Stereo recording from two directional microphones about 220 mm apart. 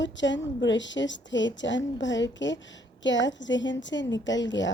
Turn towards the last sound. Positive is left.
turn(degrees=55)  # may be behind; listen again after turning